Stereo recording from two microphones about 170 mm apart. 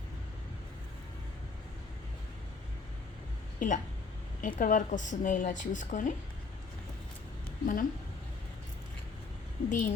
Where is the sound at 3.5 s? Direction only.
50° left (ahead or behind).